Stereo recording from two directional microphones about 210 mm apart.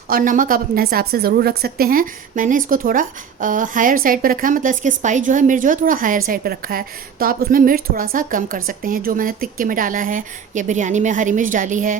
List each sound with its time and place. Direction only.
0.1 s a woman's voice: 40° right (ahead or behind)